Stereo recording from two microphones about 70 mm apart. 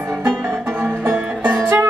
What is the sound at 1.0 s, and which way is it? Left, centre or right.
Music, right.